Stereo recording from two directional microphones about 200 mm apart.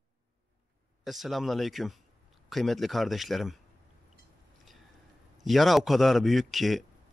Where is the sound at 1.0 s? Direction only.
Centre (ahead or behind).